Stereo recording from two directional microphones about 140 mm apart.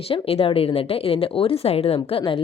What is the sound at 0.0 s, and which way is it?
A woman's voice, 45° left (ahead or behind).